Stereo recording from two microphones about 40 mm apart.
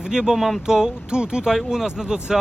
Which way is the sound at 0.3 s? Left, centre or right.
Centre.